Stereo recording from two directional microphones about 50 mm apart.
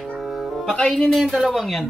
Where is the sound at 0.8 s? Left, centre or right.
Centre.